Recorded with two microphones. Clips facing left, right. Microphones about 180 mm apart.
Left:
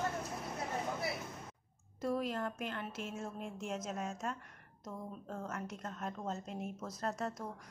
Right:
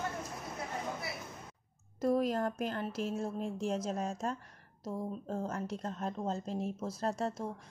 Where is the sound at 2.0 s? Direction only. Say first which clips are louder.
Right 6 dB; 40° right (ahead or behind).